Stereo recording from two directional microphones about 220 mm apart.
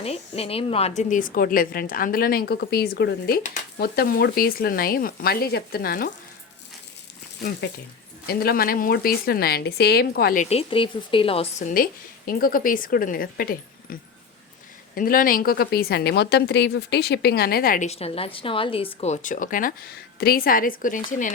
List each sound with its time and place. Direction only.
0.0 s a woman's voice: 25° left (ahead or behind); by 6.1 s 45° left (ahead or behind)
8.3 s a woman's voice: 45° left (ahead or behind); by 11.7 s 25° left (ahead or behind)
11.7 s a woman's voice: 40° left (ahead or behind)